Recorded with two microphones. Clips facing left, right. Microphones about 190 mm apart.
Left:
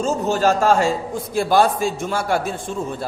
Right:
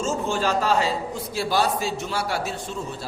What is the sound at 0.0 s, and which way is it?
A man's voice, 40° left (ahead or behind).